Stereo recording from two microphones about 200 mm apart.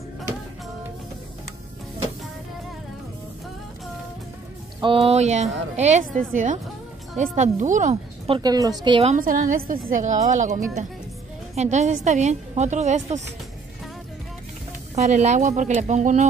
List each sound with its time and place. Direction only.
4.7 s a woman's voice: 25° right (ahead or behind)
9.1 s a woman's voice: 40° right (ahead or behind)
15.0 s a woman's voice: 35° right (ahead or behind)